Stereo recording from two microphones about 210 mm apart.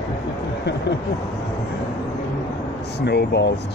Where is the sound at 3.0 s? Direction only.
50° left (ahead or behind).